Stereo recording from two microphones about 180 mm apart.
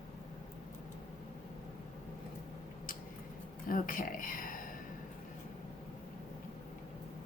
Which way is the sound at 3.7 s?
50° left (ahead or behind).